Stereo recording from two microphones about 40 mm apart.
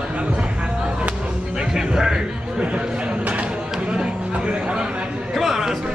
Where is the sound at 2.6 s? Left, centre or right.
Right.